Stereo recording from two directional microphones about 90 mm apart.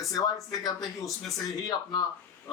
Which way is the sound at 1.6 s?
50° left (ahead or behind).